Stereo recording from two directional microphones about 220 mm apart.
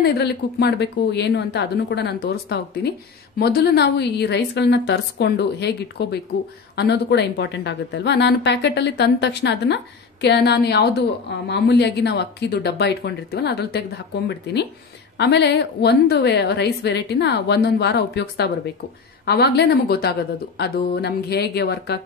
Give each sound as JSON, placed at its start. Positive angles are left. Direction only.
{"t": 0.0, "sound": "a woman's voice", "side_deg": 50}